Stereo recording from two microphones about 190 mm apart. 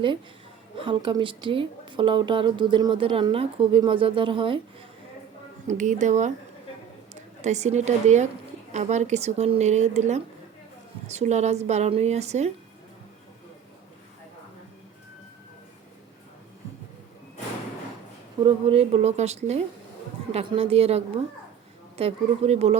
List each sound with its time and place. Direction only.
0.8 s speech: 25° right (ahead or behind)
5.6 s a woman's voice: 40° right (ahead or behind)
7.4 s a woman's voice: 35° right (ahead or behind)
18.3 s a woman's voice: 30° right (ahead or behind)